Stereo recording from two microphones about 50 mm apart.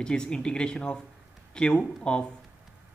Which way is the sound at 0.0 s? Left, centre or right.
Centre.